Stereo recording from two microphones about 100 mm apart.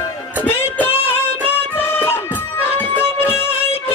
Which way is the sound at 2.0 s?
20° left (ahead or behind).